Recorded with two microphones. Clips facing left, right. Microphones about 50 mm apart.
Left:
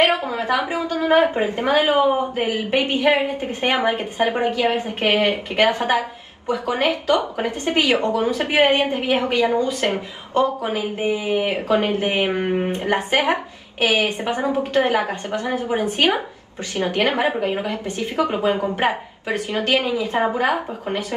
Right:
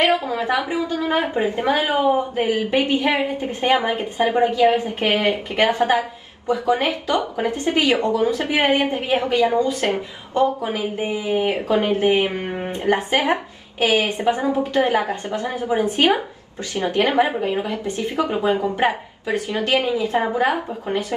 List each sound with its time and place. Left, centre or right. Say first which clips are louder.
0.0 s a woman's voice: even; left